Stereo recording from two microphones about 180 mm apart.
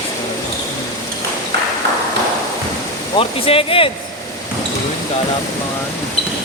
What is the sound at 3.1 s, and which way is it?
Speech, 30° left (ahead or behind).